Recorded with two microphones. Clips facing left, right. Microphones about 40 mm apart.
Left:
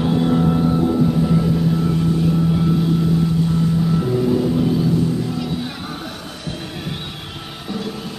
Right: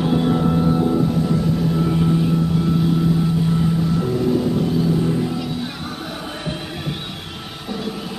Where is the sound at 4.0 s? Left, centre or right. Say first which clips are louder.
Left 1 dB; centre.